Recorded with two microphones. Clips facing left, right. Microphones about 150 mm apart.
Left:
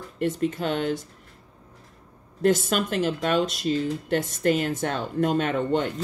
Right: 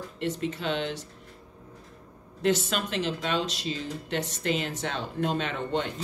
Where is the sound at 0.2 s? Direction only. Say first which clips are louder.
Left 5 dB; 50° left (ahead or behind).